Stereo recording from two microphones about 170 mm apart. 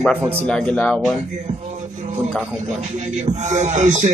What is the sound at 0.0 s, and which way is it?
Speech, 5° left (ahead or behind).